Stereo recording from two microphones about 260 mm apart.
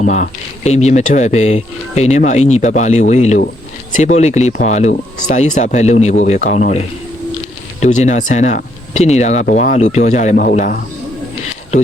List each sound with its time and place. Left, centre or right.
0.0 s speech: left